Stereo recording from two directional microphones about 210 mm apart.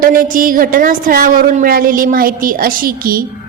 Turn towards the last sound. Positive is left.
turn(degrees=-45)  # may be behind; listen again after turning